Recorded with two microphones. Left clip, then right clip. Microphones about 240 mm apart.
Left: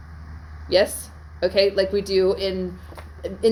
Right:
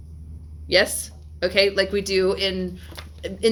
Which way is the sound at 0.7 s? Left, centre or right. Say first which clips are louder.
Even; right.